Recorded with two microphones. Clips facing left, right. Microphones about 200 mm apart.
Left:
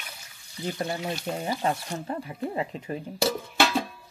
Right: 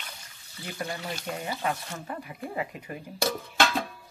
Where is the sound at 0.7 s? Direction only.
20° left (ahead or behind).